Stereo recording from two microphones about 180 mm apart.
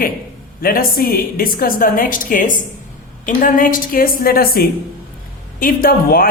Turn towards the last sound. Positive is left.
turn(degrees=55)  # may be behind; listen again after turning